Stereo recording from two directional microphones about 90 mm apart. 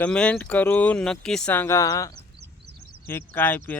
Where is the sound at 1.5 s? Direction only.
25° left (ahead or behind).